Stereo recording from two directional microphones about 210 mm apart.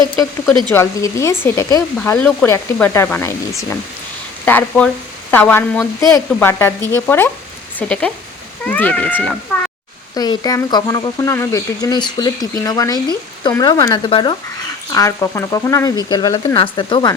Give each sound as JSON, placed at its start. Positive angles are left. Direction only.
{"t": 0.7, "sound": "speech", "side_deg": 15}